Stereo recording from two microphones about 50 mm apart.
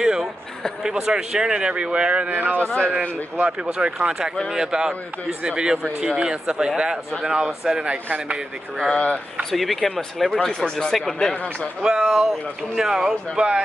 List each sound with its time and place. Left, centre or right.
0.0 s a sound: centre
0.8 s speech: centre; by 2.6 s right
2.6 s speech: left
3.0 s speech: right
9.4 s speech: centre
10.6 s speech: centre
11.8 s speech: centre